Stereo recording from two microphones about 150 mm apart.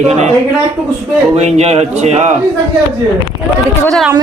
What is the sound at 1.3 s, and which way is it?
A man's voice, 45° right (ahead or behind).